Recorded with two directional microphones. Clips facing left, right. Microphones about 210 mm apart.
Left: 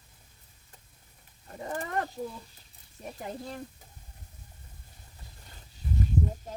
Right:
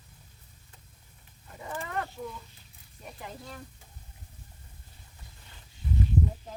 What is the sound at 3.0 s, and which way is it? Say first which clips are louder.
Speech: left 5 dB; 40° left (ahead or behind).